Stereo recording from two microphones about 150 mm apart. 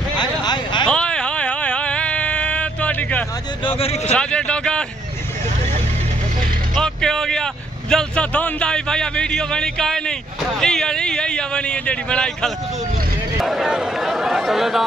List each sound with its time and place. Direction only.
0.2 s a sound: 30° left (ahead or behind)
0.8 s a sound: 5° left (ahead or behind)
3.6 s speech: 40° left (ahead or behind)
4.1 s speech: 5° left (ahead or behind)
6.7 s vehicle: 5° left (ahead or behind)
7.9 s speech: 5° left (ahead or behind)